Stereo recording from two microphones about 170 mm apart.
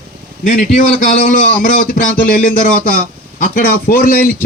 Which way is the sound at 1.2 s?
50° left (ahead or behind).